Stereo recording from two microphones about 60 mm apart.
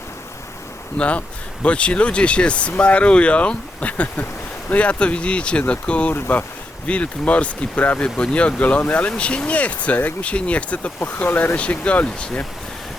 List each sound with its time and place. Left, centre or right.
0.9 s speech: left
6.1 s speech: left
6.8 s speech: left
11.5 s speech: left